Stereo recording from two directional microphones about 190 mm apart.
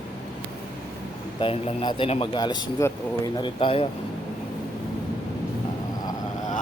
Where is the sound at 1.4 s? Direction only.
25° left (ahead or behind).